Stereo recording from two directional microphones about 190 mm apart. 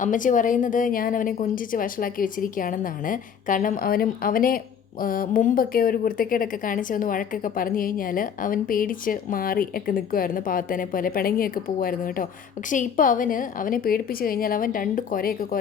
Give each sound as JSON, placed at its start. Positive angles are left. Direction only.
{"t": 0.0, "sound": "a woman's voice", "side_deg": 45}